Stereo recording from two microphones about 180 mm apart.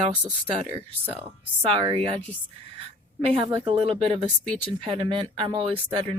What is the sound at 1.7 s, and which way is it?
A woman's voice, 30° right (ahead or behind).